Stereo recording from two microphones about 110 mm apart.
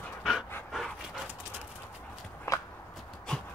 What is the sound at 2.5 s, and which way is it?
Walk, 25° left (ahead or behind).